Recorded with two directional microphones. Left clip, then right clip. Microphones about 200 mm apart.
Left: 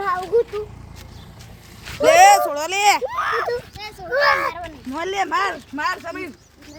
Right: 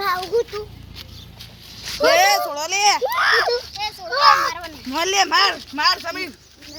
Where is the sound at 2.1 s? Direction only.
60° left (ahead or behind).